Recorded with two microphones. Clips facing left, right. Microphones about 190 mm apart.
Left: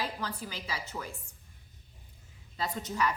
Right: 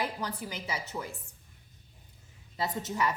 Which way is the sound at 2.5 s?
20° right (ahead or behind).